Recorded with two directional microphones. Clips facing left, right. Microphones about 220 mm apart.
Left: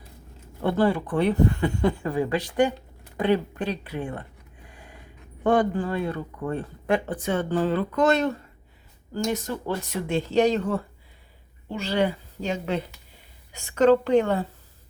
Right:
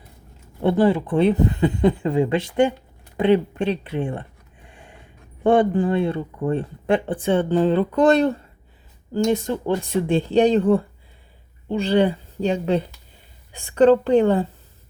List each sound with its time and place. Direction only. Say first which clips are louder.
0.6 s speech: right 5 dB; 20° right (ahead or behind)
3.2 s a sound: right 5 dB; 20° right (ahead or behind)
5.4 s speech: right 5 dB; 25° right (ahead or behind)